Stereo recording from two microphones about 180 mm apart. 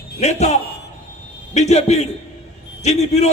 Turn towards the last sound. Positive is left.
turn(degrees=40)  # may be behind; listen again after turning